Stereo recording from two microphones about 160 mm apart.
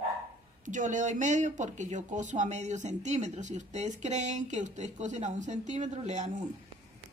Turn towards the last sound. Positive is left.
turn(degrees=-45)  # may be behind; listen again after turning